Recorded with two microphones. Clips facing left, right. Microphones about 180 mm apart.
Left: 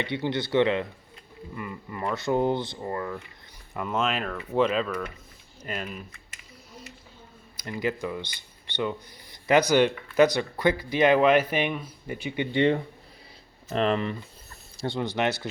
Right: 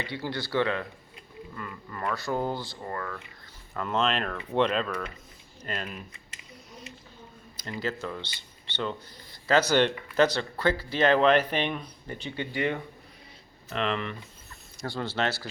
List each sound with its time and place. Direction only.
0.0 s speech: 20° left (ahead or behind)
3.8 s speech: 10° left (ahead or behind)
7.5 s speech: 15° left (ahead or behind)
12.5 s speech: 25° left (ahead or behind)
13.7 s speech: 40° left (ahead or behind)
14.8 s speech: 20° left (ahead or behind)